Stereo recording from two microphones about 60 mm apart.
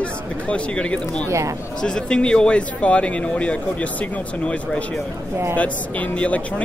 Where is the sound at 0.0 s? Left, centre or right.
Centre.